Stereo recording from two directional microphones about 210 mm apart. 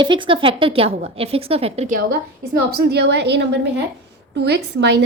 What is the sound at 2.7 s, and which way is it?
A woman's voice, 50° right (ahead or behind).